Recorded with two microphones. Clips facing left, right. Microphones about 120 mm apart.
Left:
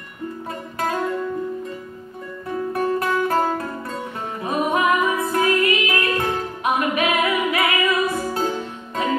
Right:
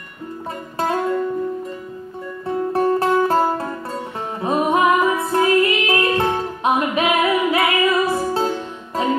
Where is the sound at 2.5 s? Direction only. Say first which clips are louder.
Right 4 dB; 30° right (ahead or behind).